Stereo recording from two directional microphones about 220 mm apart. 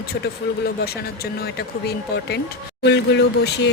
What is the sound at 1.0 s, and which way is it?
A woman's voice, 45° left (ahead or behind).